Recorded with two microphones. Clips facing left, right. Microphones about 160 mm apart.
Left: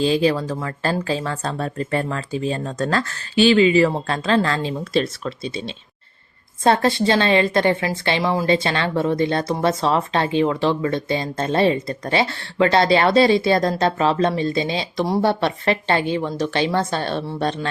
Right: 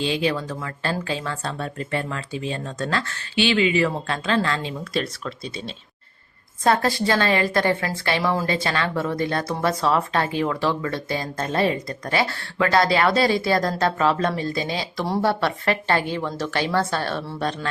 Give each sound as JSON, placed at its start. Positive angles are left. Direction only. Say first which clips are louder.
{"t": 0.0, "sound": "speech", "louder": "left 5 dB", "side_deg": 35}
{"t": 6.7, "sound": "a woman's voice", "louder": "left 3 dB", "side_deg": 25}